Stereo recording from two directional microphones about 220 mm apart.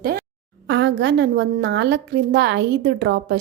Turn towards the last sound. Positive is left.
turn(degrees=-55)  # may be behind; listen again after turning